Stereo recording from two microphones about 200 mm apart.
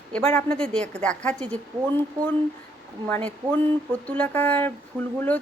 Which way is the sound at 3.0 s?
10° left (ahead or behind).